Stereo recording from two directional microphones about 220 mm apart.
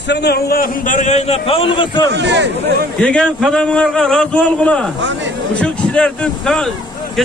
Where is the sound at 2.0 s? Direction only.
55° right (ahead or behind).